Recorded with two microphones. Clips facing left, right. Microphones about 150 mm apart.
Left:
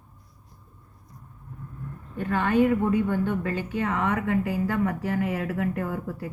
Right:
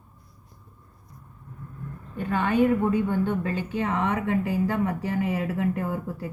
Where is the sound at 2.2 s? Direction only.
20° right (ahead or behind).